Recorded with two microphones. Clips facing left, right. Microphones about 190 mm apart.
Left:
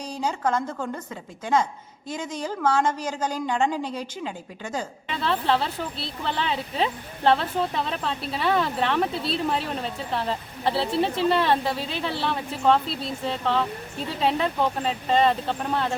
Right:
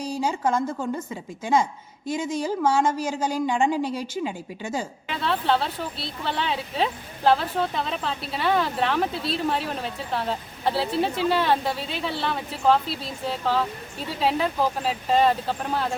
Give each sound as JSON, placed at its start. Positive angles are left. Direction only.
{"t": 0.0, "sound": "a woman's voice", "side_deg": -10}
{"t": 2.0, "sound": "speech", "side_deg": -10}